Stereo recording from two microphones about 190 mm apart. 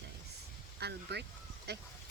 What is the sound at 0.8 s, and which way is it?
Speech, 60° right (ahead or behind).